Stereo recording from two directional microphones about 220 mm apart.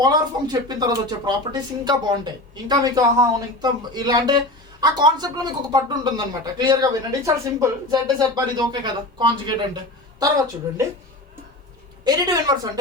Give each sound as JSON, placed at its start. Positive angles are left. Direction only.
{"t": 0.0, "sound": "a woman's voice", "side_deg": -20}
{"t": 12.0, "sound": "a woman's voice", "side_deg": -15}